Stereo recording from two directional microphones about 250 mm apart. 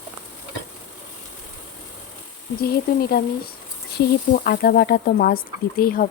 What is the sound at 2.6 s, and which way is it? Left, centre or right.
Speech, left.